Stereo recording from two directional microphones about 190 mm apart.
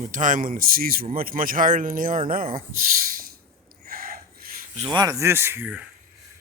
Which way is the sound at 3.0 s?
50° right (ahead or behind).